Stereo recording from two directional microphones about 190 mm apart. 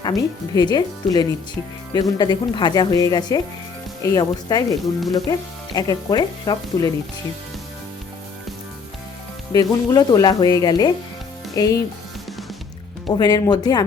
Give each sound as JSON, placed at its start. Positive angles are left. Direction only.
{"t": 0.0, "sound": "speech", "side_deg": 20}
{"t": 9.5, "sound": "speech", "side_deg": 20}
{"t": 13.1, "sound": "speech", "side_deg": 20}